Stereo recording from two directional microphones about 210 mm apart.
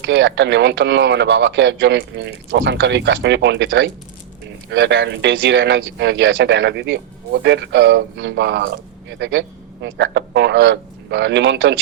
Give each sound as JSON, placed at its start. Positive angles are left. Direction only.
{"t": 0.0, "sound": "a man's voice", "side_deg": -55}